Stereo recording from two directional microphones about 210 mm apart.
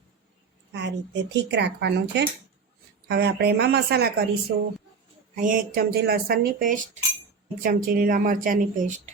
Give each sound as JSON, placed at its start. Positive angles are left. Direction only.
{"t": 0.7, "sound": "a woman's voice", "side_deg": -55}
{"t": 5.3, "sound": "a woman's voice", "side_deg": -40}